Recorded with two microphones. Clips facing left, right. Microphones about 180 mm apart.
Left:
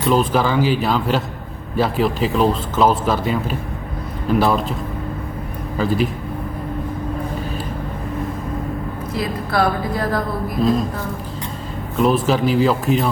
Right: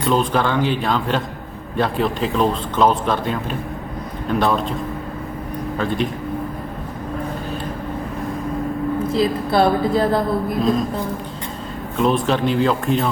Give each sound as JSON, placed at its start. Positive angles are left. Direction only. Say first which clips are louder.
{"t": 0.0, "sound": "a man's voice", "louder": "left 1 dB", "side_deg": 5}
{"t": 5.7, "sound": "a man's voice", "louder": "left 3 dB", "side_deg": 5}
{"t": 9.1, "sound": "a woman's voice", "louder": "right 2 dB", "side_deg": -25}
{"t": 11.9, "sound": "a man's voice", "louder": "left 1 dB", "side_deg": 5}